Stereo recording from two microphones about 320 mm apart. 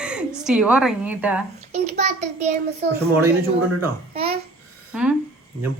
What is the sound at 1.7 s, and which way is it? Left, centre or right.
A child's voice, right.